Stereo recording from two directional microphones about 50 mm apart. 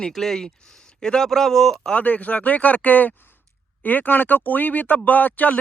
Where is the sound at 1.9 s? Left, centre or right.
Left.